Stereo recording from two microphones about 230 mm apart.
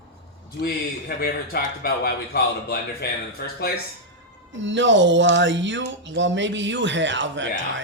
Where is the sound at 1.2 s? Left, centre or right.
Left.